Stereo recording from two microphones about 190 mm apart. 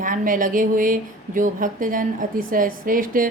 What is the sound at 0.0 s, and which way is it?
Speech, 45° right (ahead or behind).